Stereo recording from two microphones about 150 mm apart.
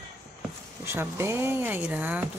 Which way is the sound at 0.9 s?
15° right (ahead or behind).